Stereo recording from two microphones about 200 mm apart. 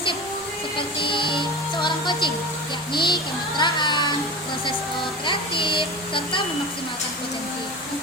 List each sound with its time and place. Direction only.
0.8 s speech: 25° left (ahead or behind)
5.2 s speech: 25° left (ahead or behind)